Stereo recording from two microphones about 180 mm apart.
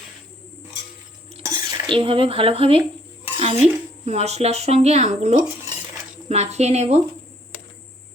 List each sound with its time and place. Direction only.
1.4 s dishes: 20° right (ahead or behind)
3.3 s speech: 35° right (ahead or behind)